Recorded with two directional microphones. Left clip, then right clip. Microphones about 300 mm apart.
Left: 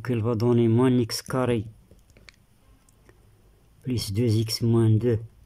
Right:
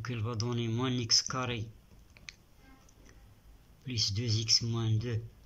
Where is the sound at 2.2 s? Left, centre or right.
Left.